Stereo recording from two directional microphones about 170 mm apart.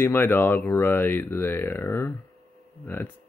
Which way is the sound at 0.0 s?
10° left (ahead or behind).